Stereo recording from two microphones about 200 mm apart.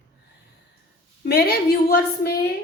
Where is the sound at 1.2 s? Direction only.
50° left (ahead or behind).